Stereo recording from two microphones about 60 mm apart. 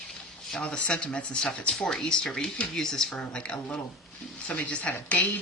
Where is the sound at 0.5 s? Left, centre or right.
Centre.